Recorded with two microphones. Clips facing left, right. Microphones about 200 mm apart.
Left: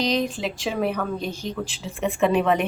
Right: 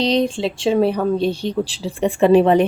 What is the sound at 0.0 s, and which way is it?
Speech, 30° right (ahead or behind).